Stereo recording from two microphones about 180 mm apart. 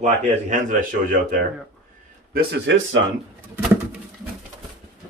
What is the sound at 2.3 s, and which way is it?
Speech, 85° right.